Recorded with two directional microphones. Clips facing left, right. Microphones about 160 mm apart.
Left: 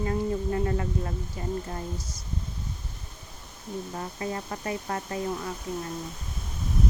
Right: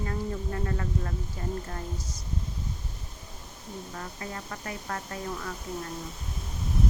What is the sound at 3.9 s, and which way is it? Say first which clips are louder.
Speech: left 6 dB; 25° left (ahead or behind).